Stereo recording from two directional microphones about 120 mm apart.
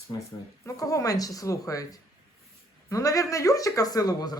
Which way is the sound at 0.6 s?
30° left (ahead or behind).